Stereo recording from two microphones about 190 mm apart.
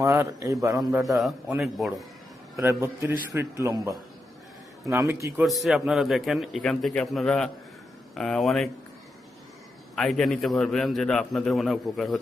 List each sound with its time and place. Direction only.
0.0 s a man's voice: 15° right (ahead or behind)
1.0 s a man's voice: centre (ahead or behind)
2.6 s a man's voice: 15° right (ahead or behind)
5.5 s a man's voice: centre (ahead or behind)
9.9 s a man's voice: centre (ahead or behind)